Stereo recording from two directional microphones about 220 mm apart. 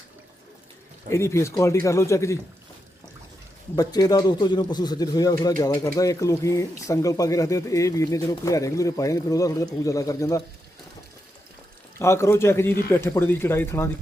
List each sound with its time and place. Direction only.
1.1 s speech: 10° left (ahead or behind)
3.8 s speech: 15° left (ahead or behind)
11.9 s speech: 10° left (ahead or behind)